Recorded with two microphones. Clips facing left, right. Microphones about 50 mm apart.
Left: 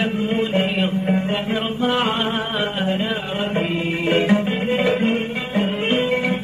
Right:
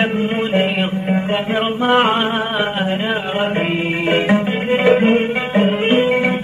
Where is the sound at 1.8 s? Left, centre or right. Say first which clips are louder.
Right 6 dB; right.